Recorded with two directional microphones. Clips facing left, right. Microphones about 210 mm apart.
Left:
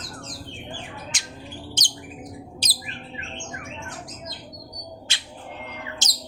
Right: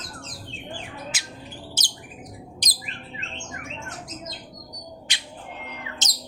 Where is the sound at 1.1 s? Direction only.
5° right (ahead or behind).